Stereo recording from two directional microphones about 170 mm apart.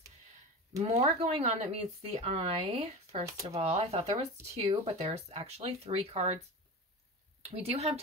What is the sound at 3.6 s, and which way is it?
Speech, 40° right (ahead or behind).